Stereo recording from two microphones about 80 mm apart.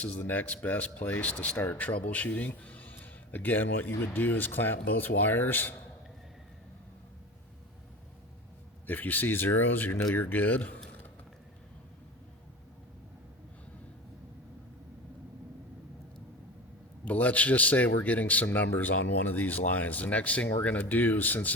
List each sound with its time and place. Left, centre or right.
0.0 s speech: left
8.9 s speech: left
17.1 s speech: centre